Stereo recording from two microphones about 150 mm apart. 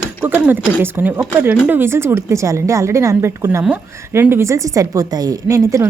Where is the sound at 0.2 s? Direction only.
10° right (ahead or behind).